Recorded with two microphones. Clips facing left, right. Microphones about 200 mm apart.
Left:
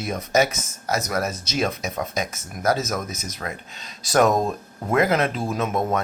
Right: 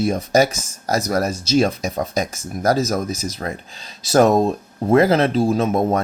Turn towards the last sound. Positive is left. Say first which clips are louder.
# right 6 dB
turn(degrees=-35)  # may be behind; listen again after turning